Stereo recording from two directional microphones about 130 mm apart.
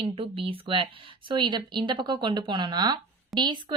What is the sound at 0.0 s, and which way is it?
Speech, 45° right (ahead or behind).